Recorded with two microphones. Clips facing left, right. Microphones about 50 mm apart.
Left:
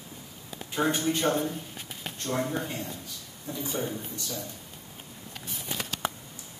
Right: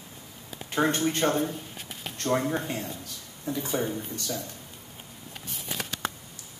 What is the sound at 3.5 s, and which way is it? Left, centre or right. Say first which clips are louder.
Speech: right 3 dB; right.